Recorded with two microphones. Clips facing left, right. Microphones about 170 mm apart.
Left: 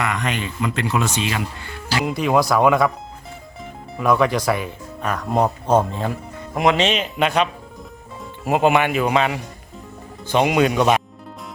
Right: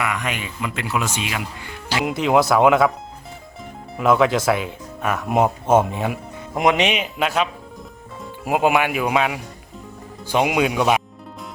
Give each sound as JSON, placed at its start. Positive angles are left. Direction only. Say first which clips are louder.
{"t": 0.0, "sound": "speech", "louder": "left 2 dB", "side_deg": -10}
{"t": 2.3, "sound": "speech", "louder": "right 1 dB", "side_deg": 0}
{"t": 4.2, "sound": "speech", "louder": "right 1 dB", "side_deg": -5}